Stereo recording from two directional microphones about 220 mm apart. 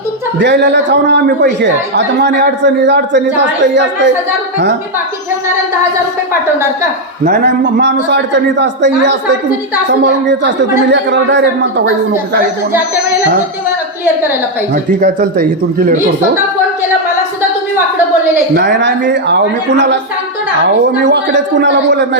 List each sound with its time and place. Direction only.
0.3 s speech: 50° right (ahead or behind)
7.3 s speech: 50° right (ahead or behind)
14.7 s speech: 45° right (ahead or behind)
18.5 s speech: 50° right (ahead or behind)
21.0 s speech: 55° right (ahead or behind)